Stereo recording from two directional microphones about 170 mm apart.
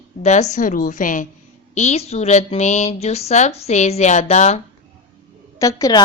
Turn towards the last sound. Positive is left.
turn(degrees=20)  # may be behind; listen again after turning